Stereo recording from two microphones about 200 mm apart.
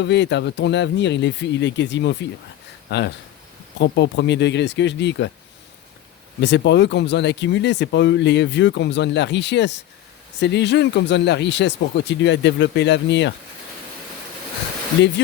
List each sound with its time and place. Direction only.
0.0 s speech: 60° left (ahead or behind)
6.4 s speech: 60° left (ahead or behind)